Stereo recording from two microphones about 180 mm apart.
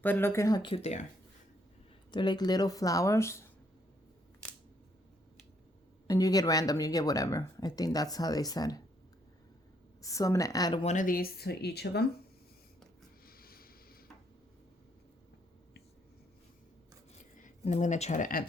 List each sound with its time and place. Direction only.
0.0 s speech: 10° left (ahead or behind); by 1.0 s 35° left (ahead or behind)
2.0 s speech: 25° left (ahead or behind)
6.1 s speech: 20° left (ahead or behind)
10.0 s speech: 20° left (ahead or behind)
10.8 s speech: 45° left (ahead or behind); by 12.0 s 60° left (ahead or behind)
13.2 s a sound: 55° left (ahead or behind)
17.3 s speech: 40° left (ahead or behind)